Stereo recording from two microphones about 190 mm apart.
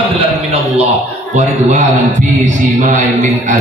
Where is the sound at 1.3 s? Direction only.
40° right (ahead or behind).